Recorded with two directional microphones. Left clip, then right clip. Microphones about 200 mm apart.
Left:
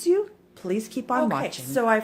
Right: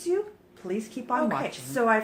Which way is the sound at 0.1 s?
55° left (ahead or behind).